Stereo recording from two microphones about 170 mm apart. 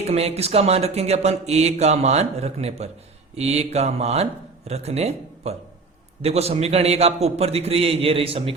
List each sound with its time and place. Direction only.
0.0 s a man's voice: 35° right (ahead or behind)